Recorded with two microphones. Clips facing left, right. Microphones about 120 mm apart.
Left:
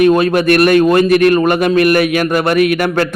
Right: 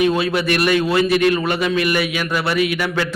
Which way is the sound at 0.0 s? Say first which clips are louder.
Left 7 dB; 50° left (ahead or behind).